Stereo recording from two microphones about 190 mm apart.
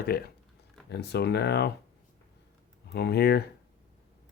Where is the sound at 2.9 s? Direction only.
60° left (ahead or behind).